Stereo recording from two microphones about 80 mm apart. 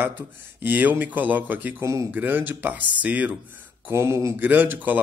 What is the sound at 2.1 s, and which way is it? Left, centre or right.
Speech, right.